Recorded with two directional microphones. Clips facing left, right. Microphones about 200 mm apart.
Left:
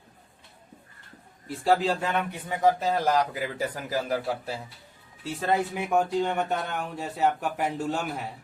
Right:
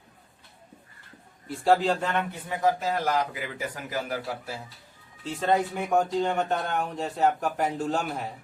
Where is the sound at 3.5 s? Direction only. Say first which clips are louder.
Left 3 dB; 35° left (ahead or behind).